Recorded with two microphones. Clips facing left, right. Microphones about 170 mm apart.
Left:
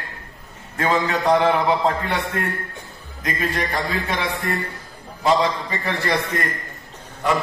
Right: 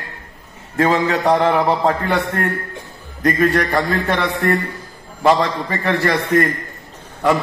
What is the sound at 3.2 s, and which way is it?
A man's voice, 65° right (ahead or behind).